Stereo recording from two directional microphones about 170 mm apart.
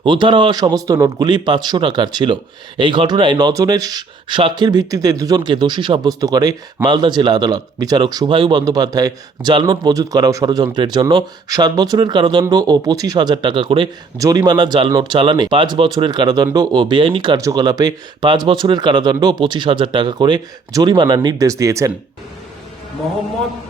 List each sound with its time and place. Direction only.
0.0 s speech: 30° right (ahead or behind)